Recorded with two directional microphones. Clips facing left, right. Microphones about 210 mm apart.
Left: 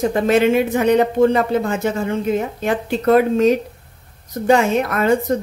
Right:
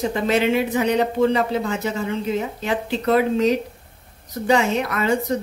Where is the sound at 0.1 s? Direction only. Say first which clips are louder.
Left 4 dB; 50° left (ahead or behind).